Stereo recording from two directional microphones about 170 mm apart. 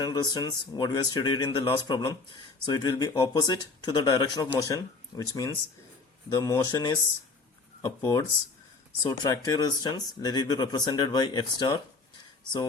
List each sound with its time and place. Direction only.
0.0 s speech: 25° left (ahead or behind)